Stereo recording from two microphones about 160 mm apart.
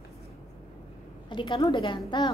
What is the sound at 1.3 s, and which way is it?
Speech, 30° left (ahead or behind).